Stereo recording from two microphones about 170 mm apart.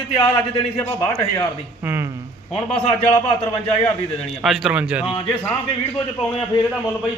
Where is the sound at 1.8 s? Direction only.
15° right (ahead or behind).